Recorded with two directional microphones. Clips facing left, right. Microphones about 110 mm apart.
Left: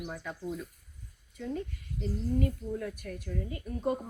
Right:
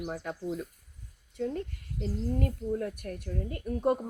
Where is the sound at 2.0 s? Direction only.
60° right (ahead or behind).